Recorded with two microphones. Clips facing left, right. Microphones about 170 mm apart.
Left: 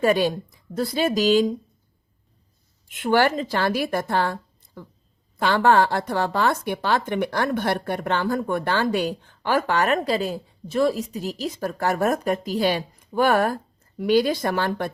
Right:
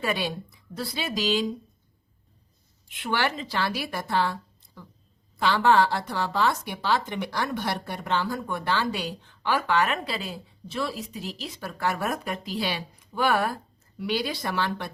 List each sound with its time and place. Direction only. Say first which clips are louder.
0.0 s speech: left 9 dB; 45° left (ahead or behind)
2.9 s speech: left 8 dB; 45° left (ahead or behind)